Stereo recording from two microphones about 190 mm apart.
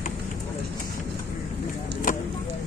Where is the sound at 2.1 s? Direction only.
45° left (ahead or behind).